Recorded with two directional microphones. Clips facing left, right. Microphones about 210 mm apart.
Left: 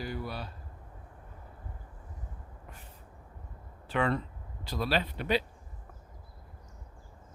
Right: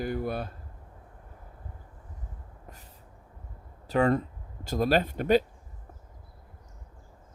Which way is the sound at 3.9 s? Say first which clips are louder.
Right 6 dB; 40° right (ahead or behind).